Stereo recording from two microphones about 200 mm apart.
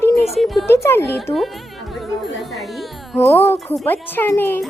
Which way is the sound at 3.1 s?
10° left (ahead or behind).